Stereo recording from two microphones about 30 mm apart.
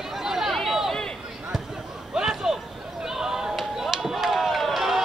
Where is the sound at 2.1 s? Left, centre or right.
Centre.